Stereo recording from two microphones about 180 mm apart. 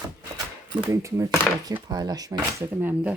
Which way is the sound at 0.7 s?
15° right (ahead or behind).